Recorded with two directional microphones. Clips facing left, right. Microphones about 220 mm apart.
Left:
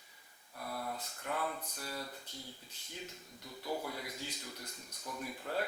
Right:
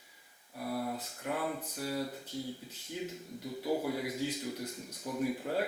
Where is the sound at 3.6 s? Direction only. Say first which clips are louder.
Right 7 dB; 10° right (ahead or behind).